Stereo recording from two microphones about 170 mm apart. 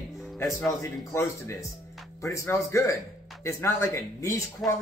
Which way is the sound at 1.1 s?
15° left (ahead or behind).